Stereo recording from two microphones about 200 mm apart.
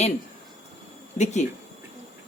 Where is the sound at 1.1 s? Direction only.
35° left (ahead or behind).